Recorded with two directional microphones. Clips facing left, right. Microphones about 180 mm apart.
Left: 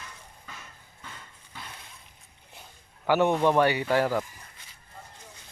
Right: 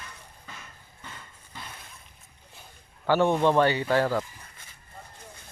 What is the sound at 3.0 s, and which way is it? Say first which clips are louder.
A man's voice: even; 15° left (ahead or behind).